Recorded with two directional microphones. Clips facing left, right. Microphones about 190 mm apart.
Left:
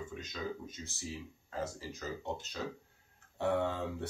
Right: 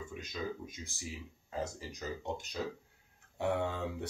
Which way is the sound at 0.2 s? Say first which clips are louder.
Right 3 dB; 10° right (ahead or behind).